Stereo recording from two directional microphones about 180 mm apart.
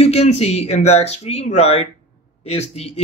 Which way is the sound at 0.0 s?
35° left (ahead or behind).